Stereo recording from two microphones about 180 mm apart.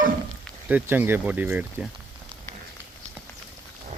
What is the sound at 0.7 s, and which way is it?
Speech, 10° right (ahead or behind).